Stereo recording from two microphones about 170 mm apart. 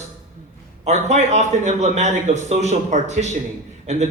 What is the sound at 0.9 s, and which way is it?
A man's voice, 40° right (ahead or behind).